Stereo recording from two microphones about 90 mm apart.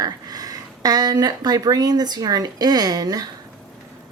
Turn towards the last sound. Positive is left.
turn(degrees=-45)  # may be behind; listen again after turning